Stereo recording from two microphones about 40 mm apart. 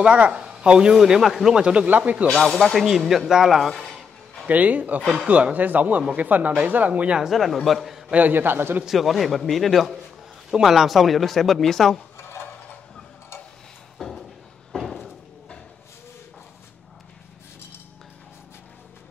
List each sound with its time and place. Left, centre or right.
0.0 s speech: right; by 1.6 s centre
1.6 s speech: right
2.6 s speech: centre
4.5 s speech: right
7.2 s speech: centre
8.3 s a man's voice: right
8.9 s speech: centre
10.5 s speech: centre
14.7 s a sound: centre